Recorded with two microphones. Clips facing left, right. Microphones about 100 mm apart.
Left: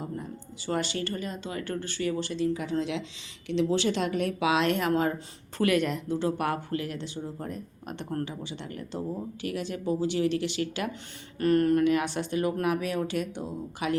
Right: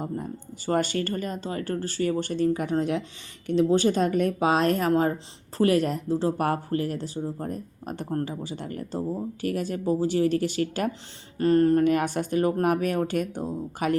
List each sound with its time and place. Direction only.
0.0 s speech: 45° right (ahead or behind)
11.3 s speech: 30° right (ahead or behind)
11.8 s speech: 45° right (ahead or behind)